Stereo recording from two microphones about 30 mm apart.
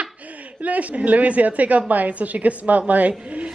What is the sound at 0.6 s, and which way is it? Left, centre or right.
A woman's voice, right.